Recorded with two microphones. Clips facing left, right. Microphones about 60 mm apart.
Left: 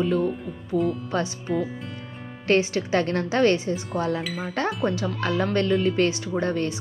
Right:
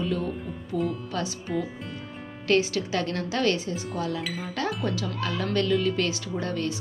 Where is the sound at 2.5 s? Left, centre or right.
Left.